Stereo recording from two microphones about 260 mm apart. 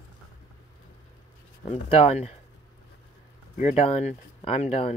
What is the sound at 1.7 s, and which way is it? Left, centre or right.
Speech, left.